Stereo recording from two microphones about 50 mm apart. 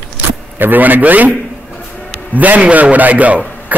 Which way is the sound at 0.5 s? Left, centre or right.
Right.